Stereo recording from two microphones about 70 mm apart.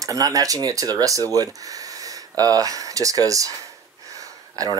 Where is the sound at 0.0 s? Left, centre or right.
Right.